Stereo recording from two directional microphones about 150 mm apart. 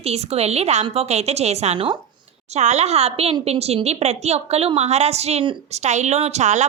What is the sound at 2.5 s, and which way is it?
A woman's voice, 50° right (ahead or behind).